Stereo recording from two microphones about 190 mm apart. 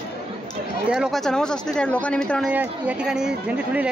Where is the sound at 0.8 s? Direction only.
5° right (ahead or behind).